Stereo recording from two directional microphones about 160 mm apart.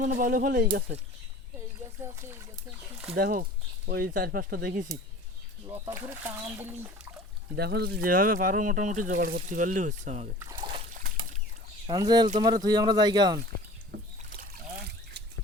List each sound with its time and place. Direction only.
0.0 s speech: 55° right (ahead or behind)
3.2 s speech: 65° right (ahead or behind)
5.7 s speech: 15° right (ahead or behind)
7.5 s speech: 90° right; by 10.2 s 50° right (ahead or behind)
11.9 s speech: 25° right (ahead or behind)
13.9 s rowboat: 90° right